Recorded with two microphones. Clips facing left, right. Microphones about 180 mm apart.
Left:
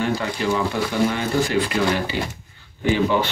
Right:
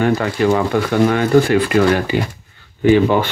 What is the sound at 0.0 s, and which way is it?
Speech, 55° right (ahead or behind).